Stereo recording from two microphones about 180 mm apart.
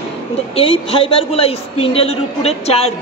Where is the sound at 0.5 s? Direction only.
30° left (ahead or behind).